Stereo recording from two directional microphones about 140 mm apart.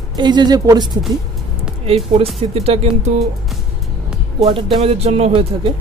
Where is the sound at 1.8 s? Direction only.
45° right (ahead or behind).